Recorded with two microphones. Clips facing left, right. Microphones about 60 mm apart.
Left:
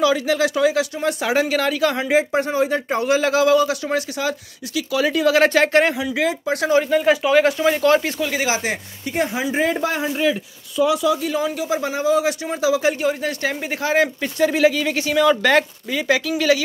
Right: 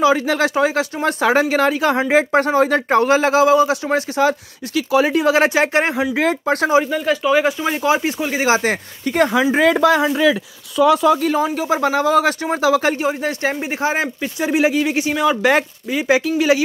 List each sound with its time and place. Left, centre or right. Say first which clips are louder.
0.0 s speech: right 2 dB; right
2.3 s speech: right 4 dB; right
3.1 s speech: even; right
6.1 s speech: right 3 dB; right
6.9 s speech: left 1 dB; centre; by 8.5 s right
8.5 s speech: right 6 dB; right
10.9 s speech: right 7 dB; right
13.2 s speech: right 3 dB; right